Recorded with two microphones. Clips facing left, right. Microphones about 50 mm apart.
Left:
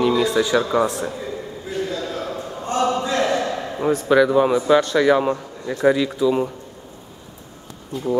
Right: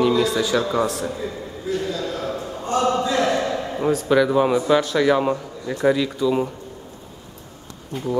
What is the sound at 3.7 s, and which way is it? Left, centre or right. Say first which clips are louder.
Speech: left 2 dB; centre.